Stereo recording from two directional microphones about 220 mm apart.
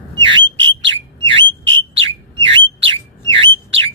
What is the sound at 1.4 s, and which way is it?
Bird, 60° right (ahead or behind).